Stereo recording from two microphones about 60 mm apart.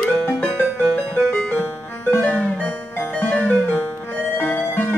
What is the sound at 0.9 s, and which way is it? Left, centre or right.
Music, left.